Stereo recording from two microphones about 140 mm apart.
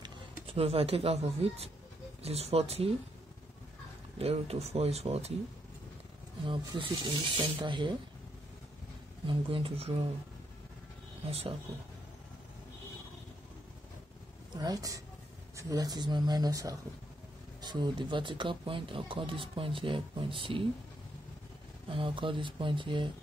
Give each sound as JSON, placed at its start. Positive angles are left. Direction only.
{"t": 0.5, "sound": "speech", "side_deg": -45}
{"t": 4.2, "sound": "speech", "side_deg": -45}
{"t": 6.4, "sound": "speech", "side_deg": -35}
{"t": 9.3, "sound": "speech", "side_deg": -40}
{"t": 11.2, "sound": "speech", "side_deg": -45}
{"t": 14.6, "sound": "speech", "side_deg": -25}
{"t": 21.8, "sound": "speech", "side_deg": -40}